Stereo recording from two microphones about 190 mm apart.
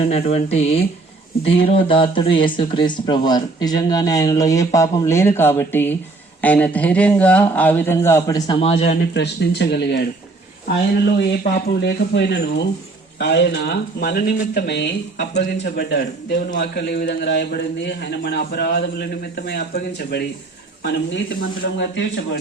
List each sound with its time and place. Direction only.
0.1 s speech: 35° left (ahead or behind)
9.1 s a man's voice: 60° left (ahead or behind)
20.8 s a man's voice: 70° left (ahead or behind)